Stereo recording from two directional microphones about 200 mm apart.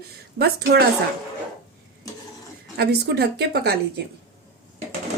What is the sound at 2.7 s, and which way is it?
A woman's voice, 50° right (ahead or behind).